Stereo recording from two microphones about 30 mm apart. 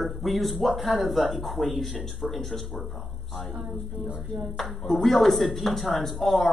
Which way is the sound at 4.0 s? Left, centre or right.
Left.